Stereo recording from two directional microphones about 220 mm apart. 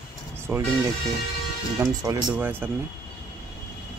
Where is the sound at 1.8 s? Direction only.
15° right (ahead or behind).